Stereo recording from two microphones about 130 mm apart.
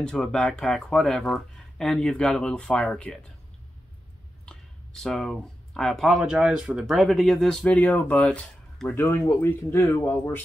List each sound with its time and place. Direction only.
0.0 s speech: 5° left (ahead or behind)
4.5 s speech: 5° left (ahead or behind)